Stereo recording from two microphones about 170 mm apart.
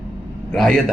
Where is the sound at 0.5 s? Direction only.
5° left (ahead or behind).